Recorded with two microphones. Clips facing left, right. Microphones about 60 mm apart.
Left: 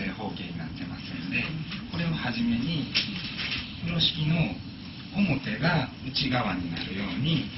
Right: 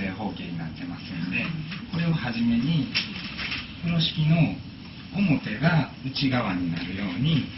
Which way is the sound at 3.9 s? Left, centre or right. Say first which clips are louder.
Right 4 dB; centre.